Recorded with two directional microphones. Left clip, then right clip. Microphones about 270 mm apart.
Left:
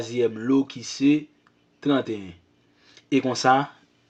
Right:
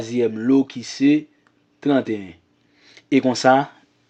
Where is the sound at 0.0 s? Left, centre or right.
Right.